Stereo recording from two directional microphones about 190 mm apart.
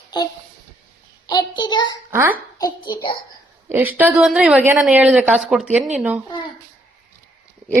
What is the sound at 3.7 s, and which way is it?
A woman's voice, 10° right (ahead or behind).